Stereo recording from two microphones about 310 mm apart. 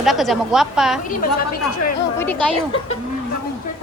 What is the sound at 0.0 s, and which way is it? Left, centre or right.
Speech, centre.